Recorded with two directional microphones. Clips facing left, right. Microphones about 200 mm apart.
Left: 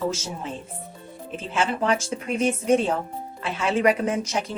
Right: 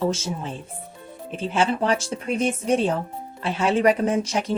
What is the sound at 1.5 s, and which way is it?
Speech, 35° right (ahead or behind).